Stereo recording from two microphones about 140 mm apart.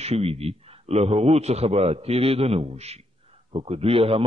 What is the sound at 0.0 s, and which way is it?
A man's voice, 45° right (ahead or behind).